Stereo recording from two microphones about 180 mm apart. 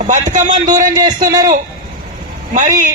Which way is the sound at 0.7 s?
20° right (ahead or behind).